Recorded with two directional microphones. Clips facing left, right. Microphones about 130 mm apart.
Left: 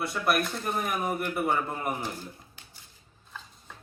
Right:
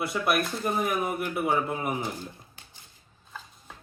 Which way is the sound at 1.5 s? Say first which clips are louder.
Right 4 dB; 15° right (ahead or behind).